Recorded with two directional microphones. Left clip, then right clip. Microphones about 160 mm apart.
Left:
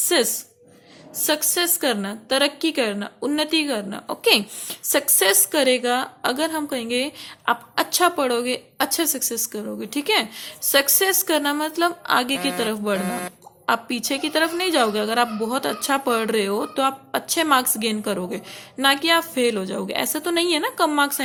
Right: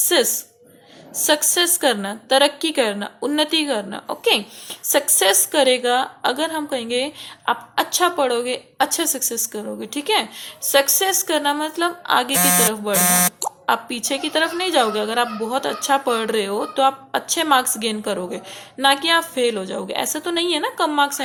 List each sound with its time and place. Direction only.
0.0 s a woman's voice: 25° left (ahead or behind)